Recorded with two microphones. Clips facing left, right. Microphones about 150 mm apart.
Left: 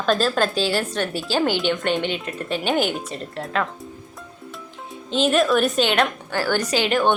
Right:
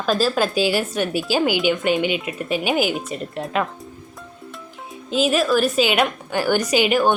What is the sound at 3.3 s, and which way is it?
Speech, 15° right (ahead or behind).